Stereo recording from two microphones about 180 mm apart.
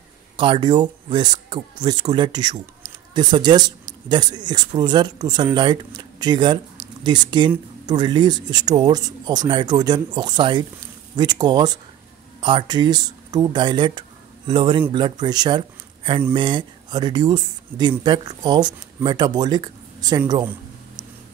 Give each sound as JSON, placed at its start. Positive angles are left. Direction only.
{"t": 0.4, "sound": "speech", "side_deg": -25}